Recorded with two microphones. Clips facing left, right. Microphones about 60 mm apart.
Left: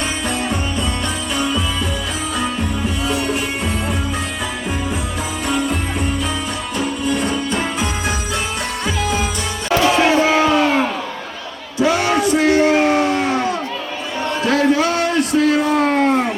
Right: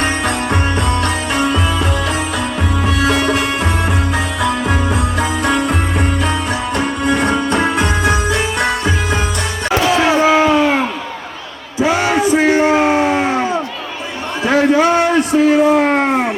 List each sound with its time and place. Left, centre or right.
0.0 s music: right
3.0 s music: right
6.7 s music: right
10.0 s a sound: centre